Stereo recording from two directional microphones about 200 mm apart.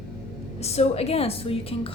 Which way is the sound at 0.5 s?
30° left (ahead or behind).